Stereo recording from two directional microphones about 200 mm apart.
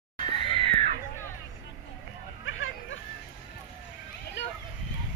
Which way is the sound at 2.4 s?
75° left (ahead or behind).